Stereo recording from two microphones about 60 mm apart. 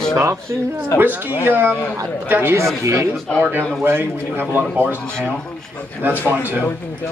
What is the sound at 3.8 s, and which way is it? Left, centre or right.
A man's voice, right.